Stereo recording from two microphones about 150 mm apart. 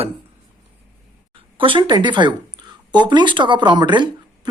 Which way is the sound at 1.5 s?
35° right (ahead or behind).